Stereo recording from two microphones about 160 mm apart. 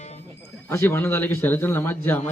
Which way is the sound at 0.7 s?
15° left (ahead or behind).